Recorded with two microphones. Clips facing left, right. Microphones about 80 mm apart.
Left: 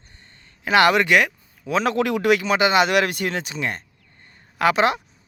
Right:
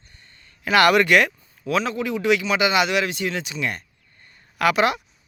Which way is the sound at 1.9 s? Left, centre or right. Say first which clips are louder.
Left 4 dB; left.